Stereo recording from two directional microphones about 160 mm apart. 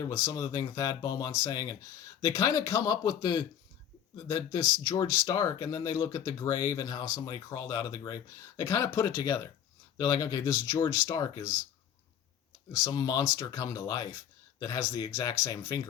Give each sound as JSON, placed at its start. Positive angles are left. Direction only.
{"t": 0.1, "sound": "speech", "side_deg": 15}
{"t": 12.8, "sound": "speech", "side_deg": 25}